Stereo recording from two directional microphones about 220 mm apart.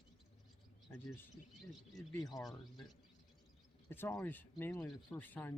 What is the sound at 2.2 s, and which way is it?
Speech, 15° left (ahead or behind).